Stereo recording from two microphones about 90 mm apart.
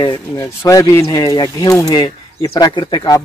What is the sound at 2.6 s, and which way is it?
Speech, 60° left (ahead or behind).